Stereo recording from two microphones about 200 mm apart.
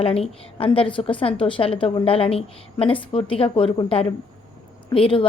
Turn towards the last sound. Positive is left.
turn(degrees=25)  # may be behind; listen again after turning